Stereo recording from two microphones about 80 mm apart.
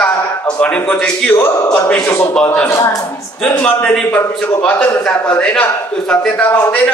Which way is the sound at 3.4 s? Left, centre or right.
Centre.